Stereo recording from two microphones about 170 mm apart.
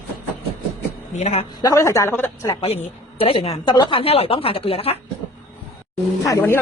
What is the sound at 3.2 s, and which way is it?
Speech, 35° left (ahead or behind).